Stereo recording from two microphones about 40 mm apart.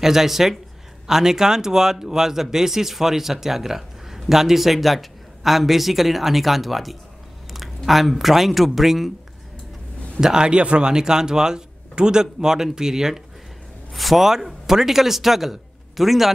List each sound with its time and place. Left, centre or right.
0.0 s speech: centre
10.2 s a man's voice: right; by 16.3 s centre